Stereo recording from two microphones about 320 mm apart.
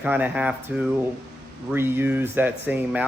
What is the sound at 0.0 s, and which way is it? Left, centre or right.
Speech, centre.